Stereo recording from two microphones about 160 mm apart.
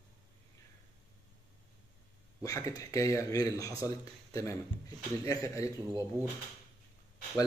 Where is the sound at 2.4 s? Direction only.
20° left (ahead or behind).